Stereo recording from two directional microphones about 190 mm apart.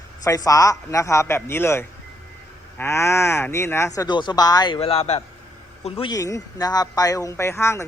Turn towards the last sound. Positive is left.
turn(degrees=15)  # may be behind; listen again after turning